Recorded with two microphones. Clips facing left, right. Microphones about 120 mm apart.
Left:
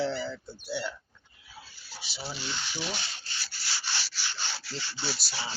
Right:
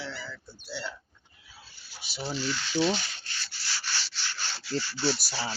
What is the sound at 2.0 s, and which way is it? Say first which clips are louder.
Speech: right 3 dB; 50° right (ahead or behind).